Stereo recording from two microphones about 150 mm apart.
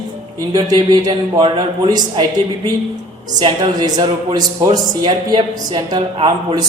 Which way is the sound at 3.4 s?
30° right (ahead or behind).